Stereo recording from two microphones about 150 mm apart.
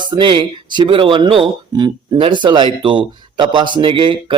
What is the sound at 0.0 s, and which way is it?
Speech, 30° right (ahead or behind).